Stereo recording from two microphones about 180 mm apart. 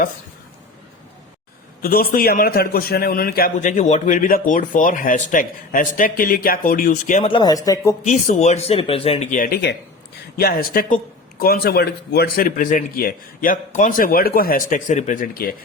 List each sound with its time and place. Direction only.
1.8 s a man's voice: 55° left (ahead or behind)
7.3 s speech: 25° left (ahead or behind)
8.4 s a man's voice: 35° left (ahead or behind); by 15.5 s 55° left (ahead or behind)